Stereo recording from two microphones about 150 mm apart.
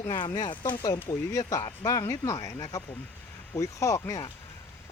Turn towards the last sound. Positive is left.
turn(degrees=20)  # may be behind; listen again after turning